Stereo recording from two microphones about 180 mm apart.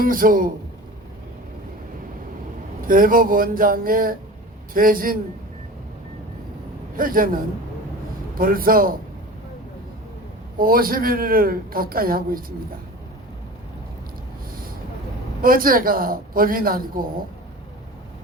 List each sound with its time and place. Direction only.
0.0 s speech: 50° right (ahead or behind)
2.8 s speech: 50° right (ahead or behind)
6.9 s speech: 50° right (ahead or behind)
10.6 s speech: 55° right (ahead or behind)
15.4 s speech: 50° right (ahead or behind)